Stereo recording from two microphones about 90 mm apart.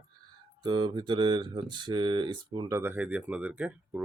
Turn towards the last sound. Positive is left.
turn(degrees=-15)  # may be behind; listen again after turning